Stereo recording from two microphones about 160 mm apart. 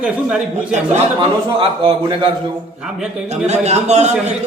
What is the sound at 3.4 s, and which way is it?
Speech, 45° right (ahead or behind).